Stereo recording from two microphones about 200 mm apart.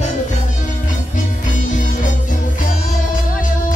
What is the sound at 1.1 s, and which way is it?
Music, 40° left (ahead or behind).